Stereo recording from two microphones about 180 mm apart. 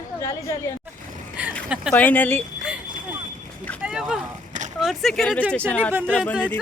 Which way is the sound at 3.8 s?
5° right (ahead or behind).